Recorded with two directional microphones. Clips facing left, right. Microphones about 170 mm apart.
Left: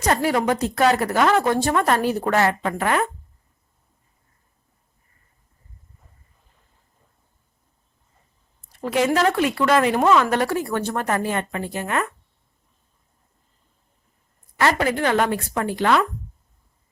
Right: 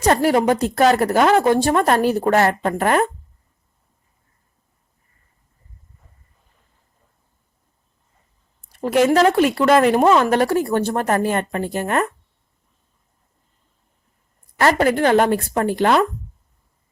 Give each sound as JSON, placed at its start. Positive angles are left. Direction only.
{"t": 0.0, "sound": "speech", "side_deg": -35}
{"t": 8.8, "sound": "speech", "side_deg": -50}
{"t": 9.0, "sound": "speech", "side_deg": -35}
{"t": 10.0, "sound": "speech", "side_deg": -30}
{"t": 14.6, "sound": "a woman's voice", "side_deg": -40}